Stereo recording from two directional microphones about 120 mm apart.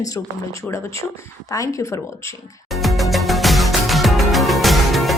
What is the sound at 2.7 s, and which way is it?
Music, centre (ahead or behind).